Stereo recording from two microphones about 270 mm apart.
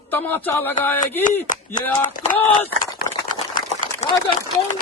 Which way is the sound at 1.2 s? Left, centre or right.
Left.